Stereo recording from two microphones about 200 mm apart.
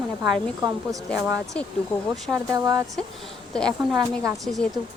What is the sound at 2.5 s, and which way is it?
Speech, 15° right (ahead or behind).